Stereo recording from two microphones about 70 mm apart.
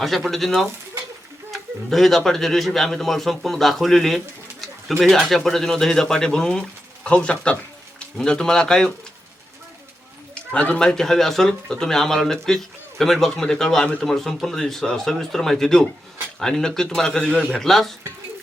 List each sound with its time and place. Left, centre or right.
0.0 s speech: centre
10.5 s speech: centre
10.8 s speech: centre